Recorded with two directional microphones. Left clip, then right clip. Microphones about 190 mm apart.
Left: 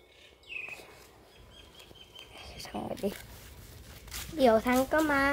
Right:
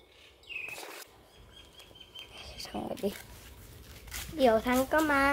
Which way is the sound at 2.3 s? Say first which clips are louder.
Even; centre (ahead or behind).